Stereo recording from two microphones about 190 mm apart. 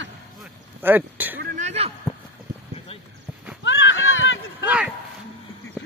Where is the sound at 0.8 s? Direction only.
10° right (ahead or behind).